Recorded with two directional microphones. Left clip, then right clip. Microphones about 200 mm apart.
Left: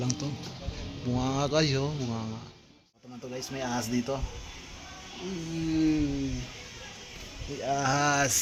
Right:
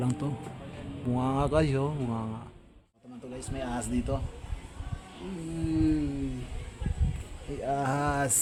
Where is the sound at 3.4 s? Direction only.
25° left (ahead or behind).